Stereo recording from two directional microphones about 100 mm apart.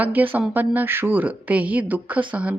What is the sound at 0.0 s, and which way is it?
A woman's voice, 20° right (ahead or behind).